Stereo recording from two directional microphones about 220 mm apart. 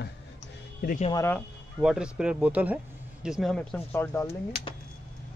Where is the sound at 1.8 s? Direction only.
5° right (ahead or behind).